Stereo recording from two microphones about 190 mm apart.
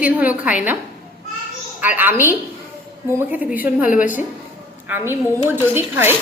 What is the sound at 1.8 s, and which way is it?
A woman's voice, 10° right (ahead or behind).